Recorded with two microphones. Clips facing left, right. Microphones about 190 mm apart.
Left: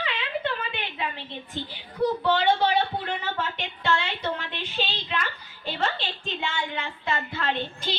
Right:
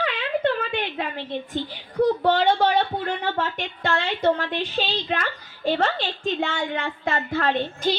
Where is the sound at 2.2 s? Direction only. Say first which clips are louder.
Right 3 dB; 45° right (ahead or behind).